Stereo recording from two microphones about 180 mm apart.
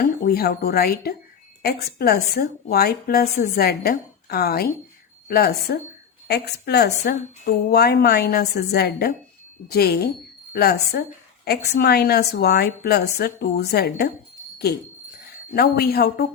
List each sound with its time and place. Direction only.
0.0 s a woman's voice: 60° left (ahead or behind)
15.5 s a woman's voice: 60° left (ahead or behind)